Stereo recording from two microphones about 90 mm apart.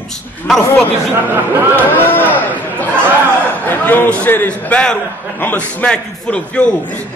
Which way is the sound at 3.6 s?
20° left (ahead or behind).